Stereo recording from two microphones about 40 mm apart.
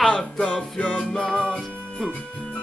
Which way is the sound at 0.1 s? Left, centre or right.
Centre.